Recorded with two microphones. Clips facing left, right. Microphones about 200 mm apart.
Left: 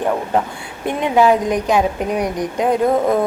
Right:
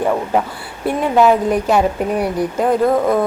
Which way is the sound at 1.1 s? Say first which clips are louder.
Right 1 dB; 5° right (ahead or behind).